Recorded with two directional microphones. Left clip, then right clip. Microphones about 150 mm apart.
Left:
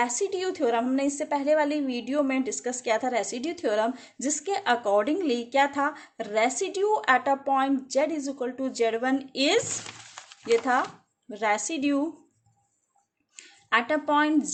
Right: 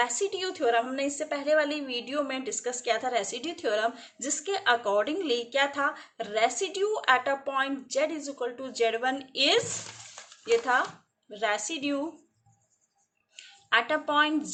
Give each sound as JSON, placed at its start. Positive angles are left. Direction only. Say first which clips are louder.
{"t": 0.0, "sound": "a woman's voice", "louder": "left 2 dB", "side_deg": 40}
{"t": 13.4, "sound": "speech", "louder": "left 1 dB", "side_deg": 45}